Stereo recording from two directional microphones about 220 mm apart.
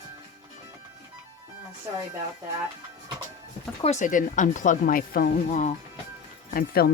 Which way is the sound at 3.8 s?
30° left (ahead or behind).